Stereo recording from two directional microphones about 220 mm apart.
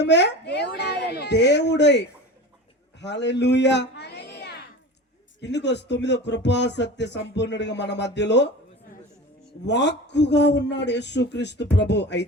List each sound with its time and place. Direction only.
0.0 s speech: 50° left (ahead or behind)
3.0 s a sound: 50° left (ahead or behind)
5.4 s speech: 50° left (ahead or behind)
9.6 s speech: 50° left (ahead or behind)